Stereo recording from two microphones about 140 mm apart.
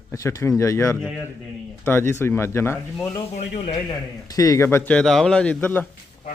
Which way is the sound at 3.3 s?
55° left (ahead or behind).